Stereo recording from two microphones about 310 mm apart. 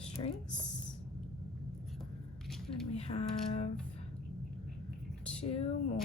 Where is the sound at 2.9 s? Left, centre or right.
Centre.